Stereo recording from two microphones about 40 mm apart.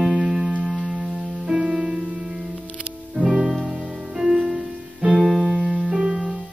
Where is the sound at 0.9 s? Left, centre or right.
Centre.